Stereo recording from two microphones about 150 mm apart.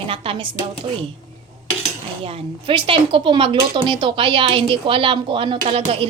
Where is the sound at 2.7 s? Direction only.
35° right (ahead or behind).